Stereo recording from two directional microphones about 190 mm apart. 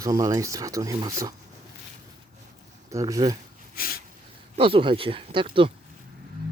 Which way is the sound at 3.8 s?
50° left (ahead or behind).